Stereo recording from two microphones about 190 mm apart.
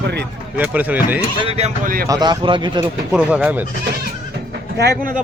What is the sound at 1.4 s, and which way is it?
Speech, 30° right (ahead or behind).